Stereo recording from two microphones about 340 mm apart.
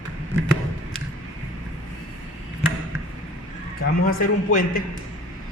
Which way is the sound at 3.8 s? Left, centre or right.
Left.